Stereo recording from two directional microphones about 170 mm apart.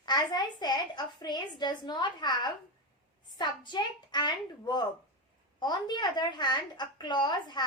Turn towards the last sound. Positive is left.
turn(degrees=25)  # may be behind; listen again after turning